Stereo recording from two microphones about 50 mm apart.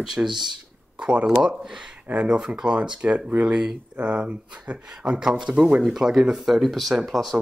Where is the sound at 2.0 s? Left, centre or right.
Right; by 7.3 s centre.